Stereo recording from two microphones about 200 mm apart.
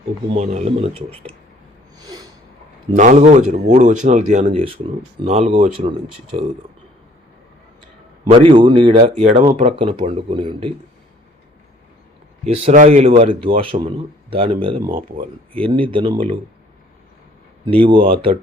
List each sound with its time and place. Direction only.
0.3 s speech: 35° right (ahead or behind)
2.0 s snort: 20° right (ahead or behind)
2.9 s speech: 35° right (ahead or behind)
8.3 s speech: 25° right (ahead or behind)
12.6 s speech: 40° right (ahead or behind)
17.7 s speech: 25° right (ahead or behind)